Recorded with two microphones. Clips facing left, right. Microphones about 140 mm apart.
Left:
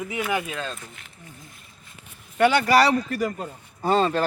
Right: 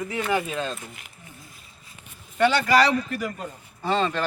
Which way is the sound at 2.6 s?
40° left (ahead or behind).